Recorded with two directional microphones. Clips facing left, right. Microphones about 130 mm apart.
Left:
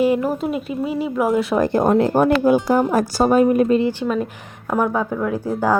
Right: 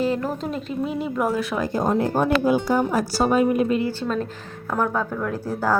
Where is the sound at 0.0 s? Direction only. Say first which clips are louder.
Left 6 dB; 10° left (ahead or behind).